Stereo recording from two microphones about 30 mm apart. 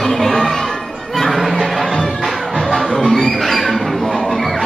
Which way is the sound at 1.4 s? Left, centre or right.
Centre.